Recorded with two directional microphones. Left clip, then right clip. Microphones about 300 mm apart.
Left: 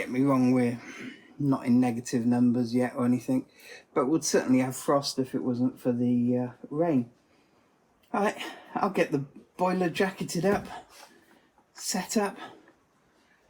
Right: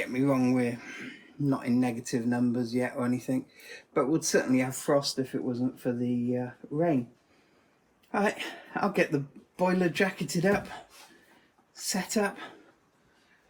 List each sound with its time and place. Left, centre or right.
0.0 s speech: centre
8.1 s speech: centre